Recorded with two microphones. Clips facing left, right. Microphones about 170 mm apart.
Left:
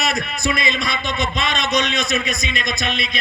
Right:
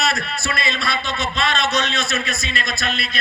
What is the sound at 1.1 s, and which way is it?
A man's voice, centre (ahead or behind).